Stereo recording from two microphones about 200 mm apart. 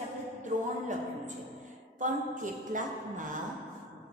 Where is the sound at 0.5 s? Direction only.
40° right (ahead or behind).